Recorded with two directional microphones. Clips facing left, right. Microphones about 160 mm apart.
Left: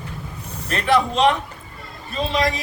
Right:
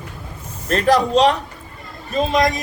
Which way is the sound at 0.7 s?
40° right (ahead or behind).